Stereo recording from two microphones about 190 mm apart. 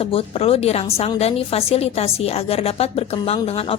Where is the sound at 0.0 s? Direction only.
30° left (ahead or behind).